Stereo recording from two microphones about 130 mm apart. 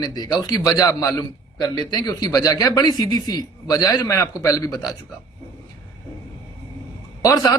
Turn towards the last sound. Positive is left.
turn(degrees=25)  # may be behind; listen again after turning